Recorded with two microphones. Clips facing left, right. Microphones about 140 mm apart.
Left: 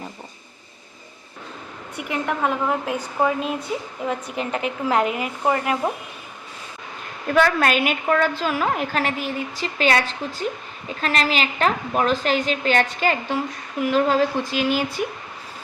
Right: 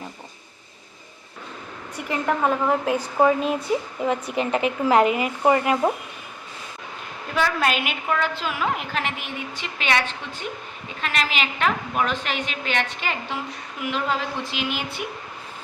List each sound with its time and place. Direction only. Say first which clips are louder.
2.0 s speech: right 1 dB; 5° left (ahead or behind)
7.3 s a woman's voice: left 4 dB; 50° left (ahead or behind)